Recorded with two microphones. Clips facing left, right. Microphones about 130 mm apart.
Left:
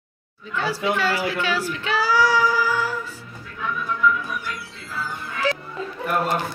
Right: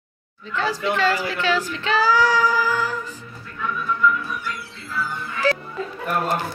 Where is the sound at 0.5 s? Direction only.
10° left (ahead or behind).